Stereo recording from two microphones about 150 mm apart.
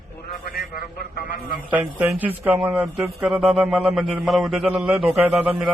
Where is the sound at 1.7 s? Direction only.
10° right (ahead or behind).